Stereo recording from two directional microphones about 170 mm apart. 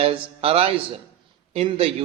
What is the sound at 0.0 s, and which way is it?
A man's voice, 35° right (ahead or behind).